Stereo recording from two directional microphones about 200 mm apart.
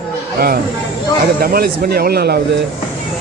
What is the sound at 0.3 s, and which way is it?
Speech, 50° right (ahead or behind).